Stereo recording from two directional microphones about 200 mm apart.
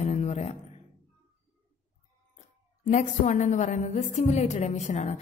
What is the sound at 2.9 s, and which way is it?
A woman's voice, 35° left (ahead or behind).